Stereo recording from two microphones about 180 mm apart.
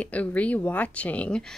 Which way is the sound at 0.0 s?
10° left (ahead or behind).